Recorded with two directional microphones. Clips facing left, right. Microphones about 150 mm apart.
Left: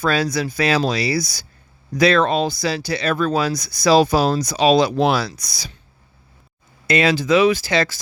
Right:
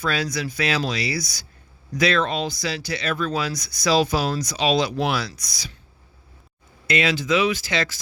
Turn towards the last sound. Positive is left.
turn(degrees=35)  # may be behind; listen again after turning